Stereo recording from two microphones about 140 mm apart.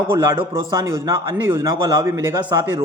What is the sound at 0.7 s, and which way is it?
A man's voice, 30° right (ahead or behind).